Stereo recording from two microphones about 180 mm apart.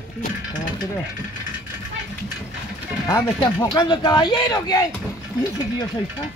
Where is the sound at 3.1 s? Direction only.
20° left (ahead or behind).